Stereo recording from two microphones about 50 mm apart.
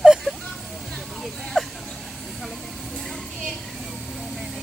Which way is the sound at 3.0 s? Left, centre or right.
Centre.